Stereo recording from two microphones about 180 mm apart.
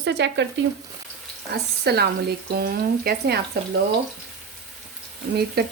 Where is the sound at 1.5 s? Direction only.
65° right (ahead or behind).